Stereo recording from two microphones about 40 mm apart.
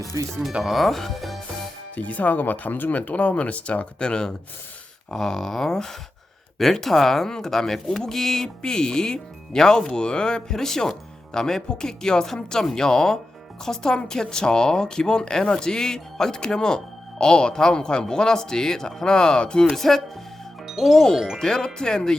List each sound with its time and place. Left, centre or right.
0.6 s speech: centre
2.0 s a woman's voice: left
19.6 s speech: centre
20.7 s music: centre
20.9 s speech: centre